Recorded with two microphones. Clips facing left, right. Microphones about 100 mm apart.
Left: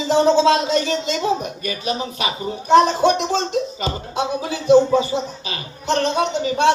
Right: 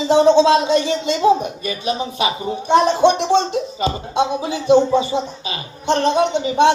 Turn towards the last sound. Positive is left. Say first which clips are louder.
# right 4 dB
turn(degrees=-20)  # may be behind; listen again after turning